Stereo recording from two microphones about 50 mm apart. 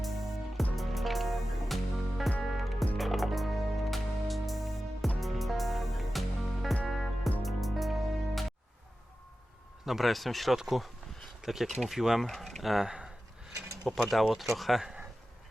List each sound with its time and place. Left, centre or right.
0.0 s music: centre
9.8 s speech: centre
12.8 s speech: centre
14.1 s speech: centre